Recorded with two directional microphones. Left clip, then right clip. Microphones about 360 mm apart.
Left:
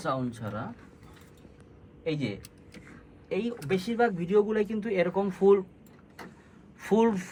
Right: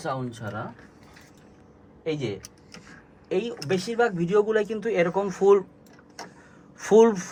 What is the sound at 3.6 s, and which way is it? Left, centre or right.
Speech, right.